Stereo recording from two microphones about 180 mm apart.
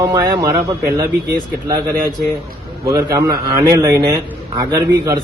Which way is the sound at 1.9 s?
60° right (ahead or behind).